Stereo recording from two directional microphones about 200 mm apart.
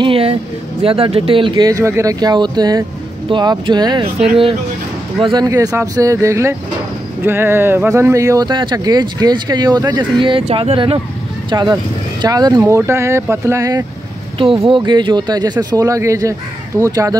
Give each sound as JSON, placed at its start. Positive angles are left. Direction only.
{"t": 0.0, "sound": "speech", "side_deg": -30}
{"t": 5.2, "sound": "speech", "side_deg": -20}